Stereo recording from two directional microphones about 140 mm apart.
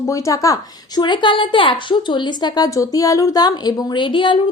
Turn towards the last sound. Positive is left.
turn(degrees=35)  # may be behind; listen again after turning